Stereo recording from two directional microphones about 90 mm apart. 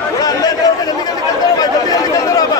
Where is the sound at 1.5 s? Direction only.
45° left (ahead or behind).